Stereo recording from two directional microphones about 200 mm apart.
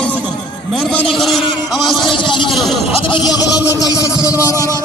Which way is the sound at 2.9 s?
25° left (ahead or behind).